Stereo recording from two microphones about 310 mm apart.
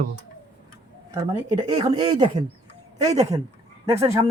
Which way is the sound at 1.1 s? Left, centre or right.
Centre.